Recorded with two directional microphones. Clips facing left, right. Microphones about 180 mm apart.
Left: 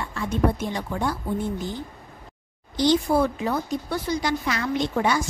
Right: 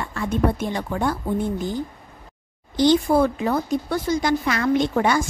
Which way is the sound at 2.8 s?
55° right (ahead or behind).